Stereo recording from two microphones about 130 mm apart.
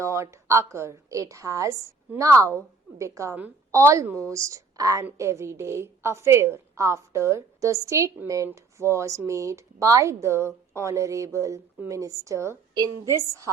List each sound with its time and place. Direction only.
0.0 s speech: 20° right (ahead or behind)